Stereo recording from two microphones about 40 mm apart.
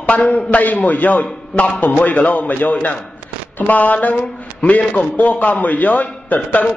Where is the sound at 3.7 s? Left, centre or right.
Left.